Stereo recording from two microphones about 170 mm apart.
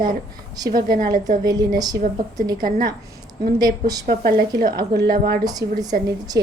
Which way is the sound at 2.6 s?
55° right (ahead or behind).